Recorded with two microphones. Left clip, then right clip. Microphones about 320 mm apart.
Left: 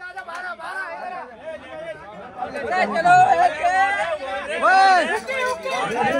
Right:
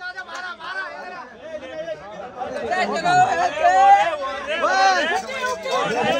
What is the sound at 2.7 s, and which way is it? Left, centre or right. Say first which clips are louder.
Speech: left 4 dB; centre.